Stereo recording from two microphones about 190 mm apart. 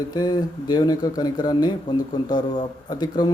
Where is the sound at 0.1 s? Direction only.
20° left (ahead or behind).